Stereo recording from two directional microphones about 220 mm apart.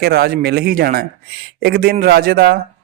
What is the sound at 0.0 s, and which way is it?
Speech, 45° right (ahead or behind).